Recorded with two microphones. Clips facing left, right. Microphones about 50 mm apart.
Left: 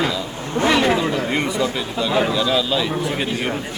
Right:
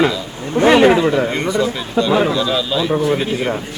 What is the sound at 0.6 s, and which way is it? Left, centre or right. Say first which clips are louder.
Speech: right 7 dB; right.